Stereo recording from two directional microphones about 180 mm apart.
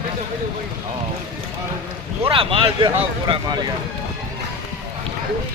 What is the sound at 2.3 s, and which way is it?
Speech, 30° right (ahead or behind).